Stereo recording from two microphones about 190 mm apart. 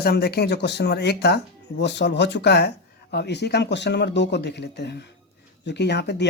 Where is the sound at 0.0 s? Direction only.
55° left (ahead or behind).